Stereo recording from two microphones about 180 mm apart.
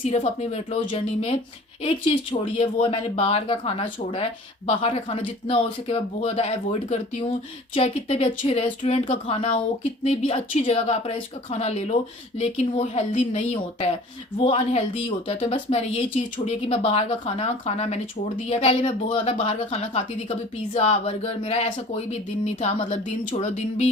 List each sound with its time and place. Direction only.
0.0 s speech: 35° left (ahead or behind)